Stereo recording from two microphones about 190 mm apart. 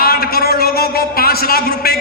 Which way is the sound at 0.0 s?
50° left (ahead or behind).